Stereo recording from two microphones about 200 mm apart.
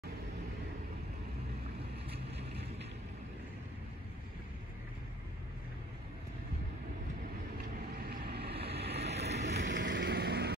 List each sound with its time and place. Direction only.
8.1 s vehicle: 50° right (ahead or behind)
9.0 s vehicle: 35° right (ahead or behind)
9.4 s vehicle: 60° right (ahead or behind)